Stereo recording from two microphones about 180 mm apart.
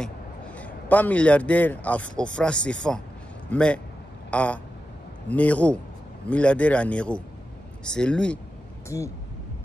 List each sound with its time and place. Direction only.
0.6 s a man's voice: 10° left (ahead or behind)
8.8 s speech: 15° left (ahead or behind)